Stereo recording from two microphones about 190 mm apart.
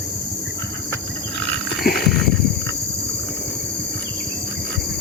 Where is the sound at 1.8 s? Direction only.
50° left (ahead or behind).